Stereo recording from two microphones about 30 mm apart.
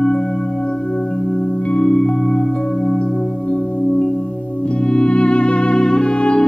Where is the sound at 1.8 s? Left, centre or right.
Centre.